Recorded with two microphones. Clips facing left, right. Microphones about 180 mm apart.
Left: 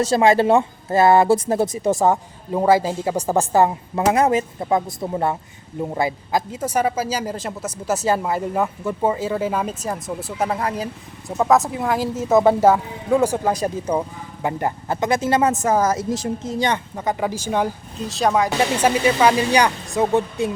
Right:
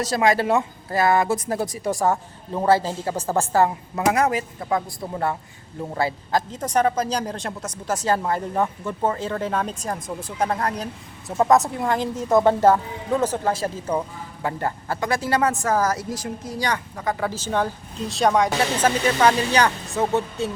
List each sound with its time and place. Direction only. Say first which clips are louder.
0.0 s speech: left 5 dB; 25° left (ahead or behind)
18.0 s speech: even; centre (ahead or behind)